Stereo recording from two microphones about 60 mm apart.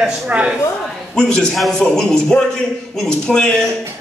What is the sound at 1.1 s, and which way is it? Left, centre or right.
A man's voice, centre.